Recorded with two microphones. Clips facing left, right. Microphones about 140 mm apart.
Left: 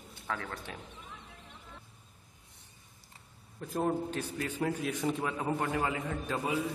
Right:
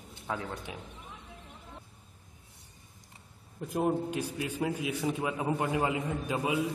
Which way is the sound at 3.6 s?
15° right (ahead or behind).